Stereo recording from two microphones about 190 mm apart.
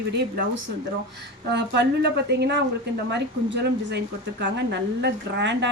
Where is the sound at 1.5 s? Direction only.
65° right (ahead or behind).